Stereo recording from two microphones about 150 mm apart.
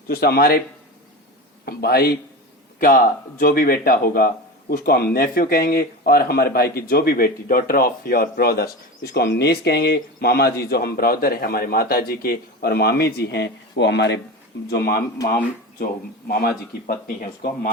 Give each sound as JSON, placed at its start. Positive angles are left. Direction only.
{"t": 0.1, "sound": "speech", "side_deg": 90}
{"t": 1.6, "sound": "speech", "side_deg": 90}
{"t": 2.8, "sound": "speech", "side_deg": 70}
{"t": 4.7, "sound": "speech", "side_deg": 85}
{"t": 14.7, "sound": "speech", "side_deg": 90}